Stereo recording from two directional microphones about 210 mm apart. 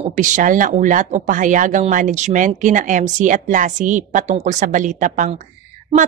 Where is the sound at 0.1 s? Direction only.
35° right (ahead or behind).